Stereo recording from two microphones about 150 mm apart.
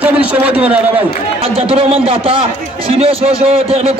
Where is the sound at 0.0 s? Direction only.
10° right (ahead or behind).